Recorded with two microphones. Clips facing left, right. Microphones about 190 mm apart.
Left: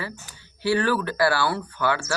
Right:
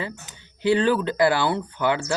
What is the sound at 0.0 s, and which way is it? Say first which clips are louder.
Speech: right 2 dB; 20° right (ahead or behind).